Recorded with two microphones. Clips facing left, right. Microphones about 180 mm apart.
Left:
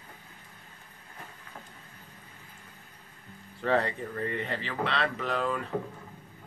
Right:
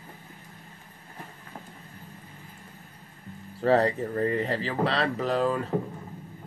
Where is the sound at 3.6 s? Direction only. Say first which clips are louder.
Right 5 dB; 35° right (ahead or behind).